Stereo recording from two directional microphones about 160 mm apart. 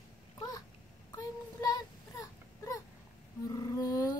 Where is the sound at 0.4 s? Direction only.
25° left (ahead or behind).